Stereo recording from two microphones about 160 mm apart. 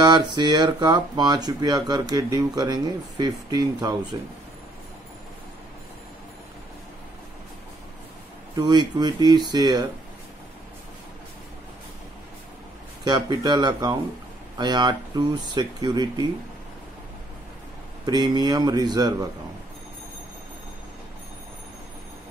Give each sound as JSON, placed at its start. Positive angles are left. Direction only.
{"t": 0.0, "sound": "speech", "side_deg": -25}
{"t": 8.5, "sound": "speech", "side_deg": -25}
{"t": 13.0, "sound": "speech", "side_deg": -25}
{"t": 18.0, "sound": "speech", "side_deg": -25}